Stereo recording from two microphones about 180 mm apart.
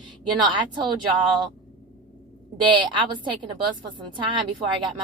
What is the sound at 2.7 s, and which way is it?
A woman's voice, 25° right (ahead or behind).